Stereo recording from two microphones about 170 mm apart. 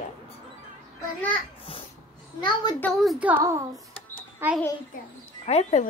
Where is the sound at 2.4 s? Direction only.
25° left (ahead or behind).